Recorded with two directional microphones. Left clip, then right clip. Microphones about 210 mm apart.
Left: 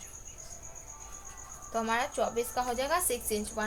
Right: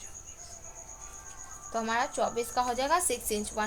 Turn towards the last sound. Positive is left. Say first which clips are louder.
# right 1 dB
turn(degrees=-35)  # may be behind; listen again after turning